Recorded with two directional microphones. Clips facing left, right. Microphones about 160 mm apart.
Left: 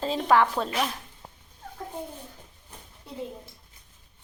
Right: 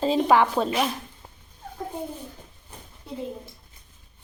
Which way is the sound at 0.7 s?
20° right (ahead or behind).